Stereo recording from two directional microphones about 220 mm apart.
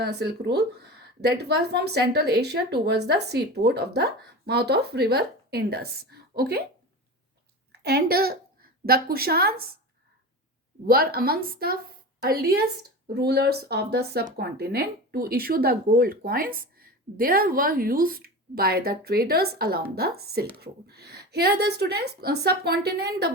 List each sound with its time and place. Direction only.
0.0 s speech: 50° right (ahead or behind)
7.7 s a woman's voice: 45° right (ahead or behind)
10.8 s speech: 45° right (ahead or behind)